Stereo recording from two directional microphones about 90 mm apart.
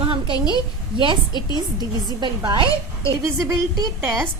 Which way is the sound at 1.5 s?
50° right (ahead or behind).